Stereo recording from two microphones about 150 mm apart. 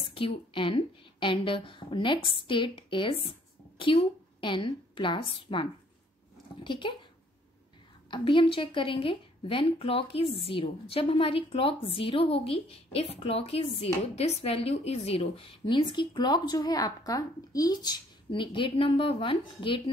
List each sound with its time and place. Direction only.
0.0 s a woman's voice: 35° left (ahead or behind)
8.1 s a woman's voice: 35° left (ahead or behind)